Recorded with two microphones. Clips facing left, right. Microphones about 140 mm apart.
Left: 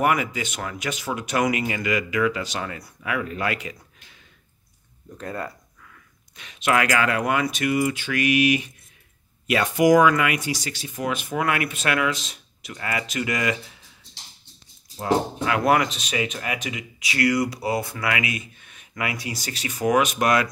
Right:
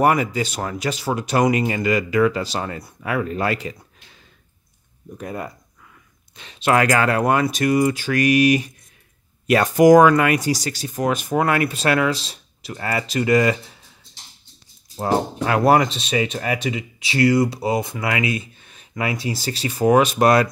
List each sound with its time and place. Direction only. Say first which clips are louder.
0.0 s speech: right 5 dB; 35° right (ahead or behind)
5.1 s speech: right 2 dB; 15° right (ahead or behind)
6.3 s speech: right 4 dB; 30° right (ahead or behind)
15.4 s speech: right 6 dB; 35° right (ahead or behind)